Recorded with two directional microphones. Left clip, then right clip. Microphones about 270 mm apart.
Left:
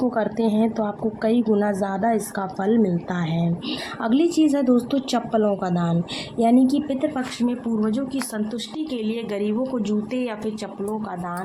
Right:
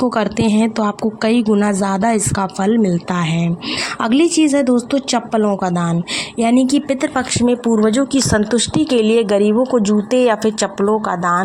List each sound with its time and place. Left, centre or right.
0.2 s a woman's voice: right